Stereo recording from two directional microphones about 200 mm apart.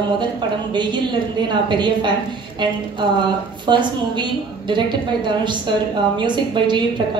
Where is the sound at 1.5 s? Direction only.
20° right (ahead or behind).